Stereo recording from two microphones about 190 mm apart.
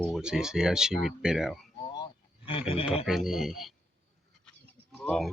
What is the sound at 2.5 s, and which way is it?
Speech, 30° left (ahead or behind).